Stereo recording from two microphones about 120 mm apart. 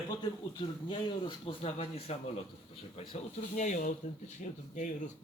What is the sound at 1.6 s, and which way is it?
Speech, 55° left (ahead or behind).